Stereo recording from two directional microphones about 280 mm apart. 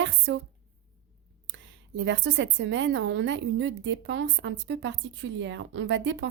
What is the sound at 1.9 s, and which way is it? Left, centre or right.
A woman's voice, right.